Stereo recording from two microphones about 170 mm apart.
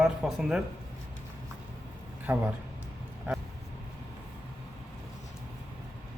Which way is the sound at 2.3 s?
10° right (ahead or behind).